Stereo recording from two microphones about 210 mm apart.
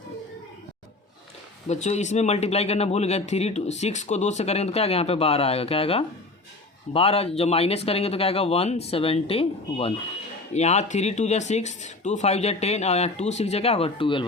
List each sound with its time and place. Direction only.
1.6 s speech: 30° left (ahead or behind)